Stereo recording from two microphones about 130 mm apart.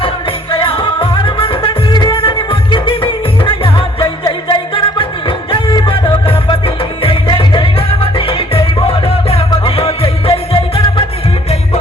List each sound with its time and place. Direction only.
0.0 s music: 45° left (ahead or behind)